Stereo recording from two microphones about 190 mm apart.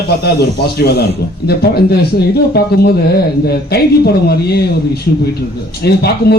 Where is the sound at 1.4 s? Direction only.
55° left (ahead or behind).